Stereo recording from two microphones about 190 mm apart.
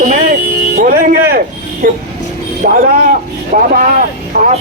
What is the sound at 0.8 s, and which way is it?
Music, 50° right (ahead or behind).